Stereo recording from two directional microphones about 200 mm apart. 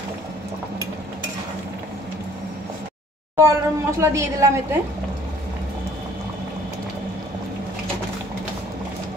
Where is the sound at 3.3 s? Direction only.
15° right (ahead or behind).